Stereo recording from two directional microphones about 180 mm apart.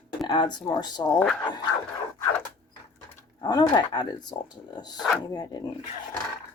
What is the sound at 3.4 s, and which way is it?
Speech, 20° left (ahead or behind).